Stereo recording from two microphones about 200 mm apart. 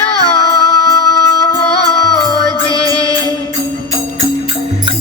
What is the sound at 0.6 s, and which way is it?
Music, 20° left (ahead or behind).